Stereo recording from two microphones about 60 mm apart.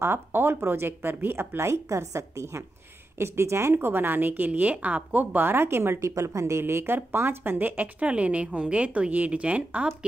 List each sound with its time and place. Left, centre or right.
0.0 s a woman's voice: right
3.7 s a woman's voice: right
6.6 s a woman's voice: right